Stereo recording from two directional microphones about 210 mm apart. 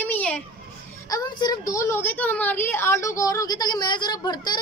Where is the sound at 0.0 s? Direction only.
5° left (ahead or behind).